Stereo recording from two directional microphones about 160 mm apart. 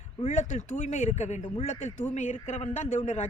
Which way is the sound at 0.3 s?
50° left (ahead or behind).